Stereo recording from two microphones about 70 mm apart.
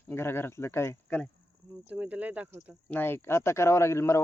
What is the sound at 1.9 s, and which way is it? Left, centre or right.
Speech, right.